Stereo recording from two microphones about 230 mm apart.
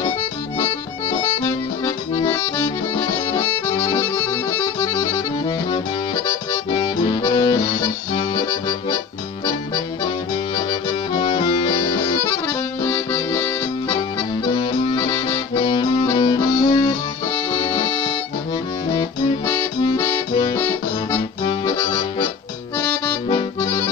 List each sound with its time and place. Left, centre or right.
1.4 s accordion: centre
6.7 s music: centre
11.1 s accordion: centre
11.5 s music: centre
12.8 s accordion: centre